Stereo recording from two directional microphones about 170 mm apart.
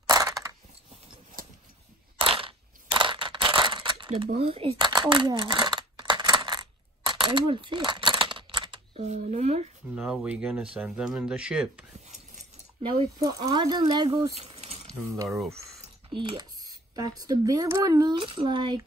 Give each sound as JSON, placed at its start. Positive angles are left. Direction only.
{"t": 0.0, "sound": "a sound", "side_deg": -20}
{"t": 2.1, "sound": "crushing", "side_deg": -30}
{"t": 4.4, "sound": "coin", "side_deg": -35}
{"t": 9.1, "sound": "speech", "side_deg": -40}
{"t": 9.9, "sound": "speech", "side_deg": -5}
{"t": 13.2, "sound": "speech", "side_deg": -20}
{"t": 14.3, "sound": "a sound", "side_deg": -40}
{"t": 15.2, "sound": "speech", "side_deg": 0}
{"t": 16.1, "sound": "speech", "side_deg": -30}
{"t": 18.2, "sound": "speech", "side_deg": -35}